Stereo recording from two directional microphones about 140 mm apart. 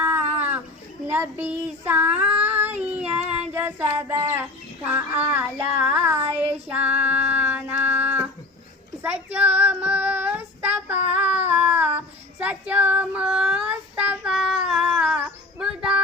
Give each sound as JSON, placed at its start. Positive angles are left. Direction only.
{"t": 0.0, "sound": "a sound", "side_deg": -15}
{"t": 1.0, "sound": "child singing", "side_deg": -15}
{"t": 3.2, "sound": "child singing", "side_deg": -50}
{"t": 3.5, "sound": "child singing", "side_deg": -15}